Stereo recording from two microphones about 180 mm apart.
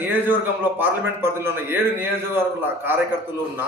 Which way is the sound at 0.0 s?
10° right (ahead or behind).